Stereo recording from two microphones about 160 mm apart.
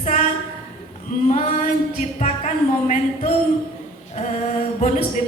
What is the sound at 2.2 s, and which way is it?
A woman's voice, 50° left (ahead or behind).